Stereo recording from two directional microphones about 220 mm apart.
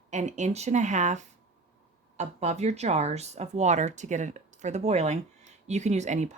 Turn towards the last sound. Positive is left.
turn(degrees=-30)  # may be behind; listen again after turning